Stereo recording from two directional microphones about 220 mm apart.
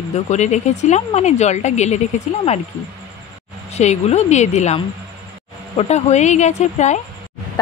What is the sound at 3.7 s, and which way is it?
Speech, 30° left (ahead or behind).